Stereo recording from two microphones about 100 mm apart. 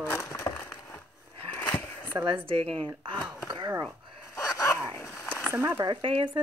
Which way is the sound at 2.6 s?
15° left (ahead or behind).